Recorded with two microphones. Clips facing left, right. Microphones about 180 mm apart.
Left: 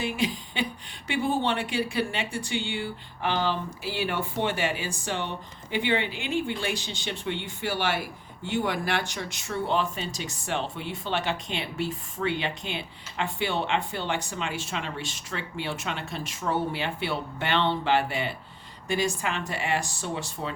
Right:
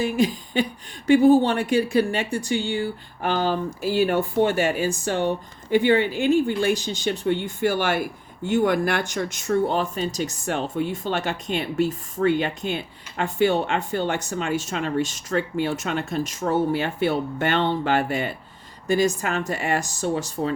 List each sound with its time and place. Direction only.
0.0 s speech: 40° right (ahead or behind)